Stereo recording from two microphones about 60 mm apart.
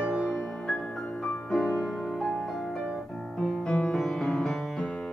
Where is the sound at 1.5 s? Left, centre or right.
Centre.